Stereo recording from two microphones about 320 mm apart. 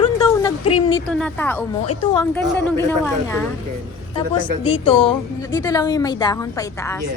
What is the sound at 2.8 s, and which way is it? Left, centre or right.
Speech, centre.